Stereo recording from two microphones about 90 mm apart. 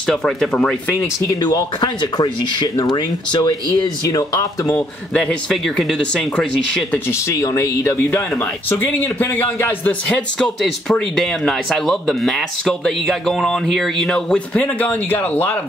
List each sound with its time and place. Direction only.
0.0 s speech: 5° left (ahead or behind)
1.4 s speech: 55° left (ahead or behind)
3.8 s speech: 45° left (ahead or behind)
4.7 s speech: 10° left (ahead or behind)
7.1 s a man's voice: 35° left (ahead or behind)
10.0 s speech: 5° left (ahead or behind); by 15.5 s 20° left (ahead or behind)